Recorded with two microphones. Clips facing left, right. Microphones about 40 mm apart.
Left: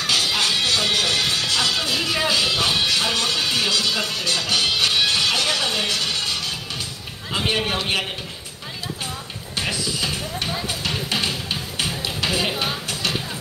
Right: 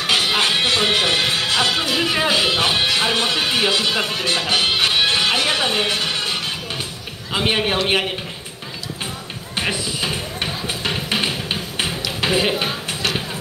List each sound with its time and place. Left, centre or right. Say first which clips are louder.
0.0 s music: right 3 dB; right
7.3 s a man's voice: right 3 dB; right
9.6 s music: right 2 dB; right
12.2 s speech: right 5 dB; right